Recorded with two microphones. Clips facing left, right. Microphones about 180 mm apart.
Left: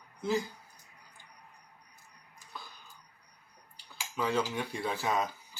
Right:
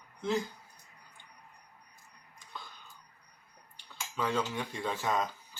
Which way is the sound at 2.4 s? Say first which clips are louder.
Even; 5° left (ahead or behind).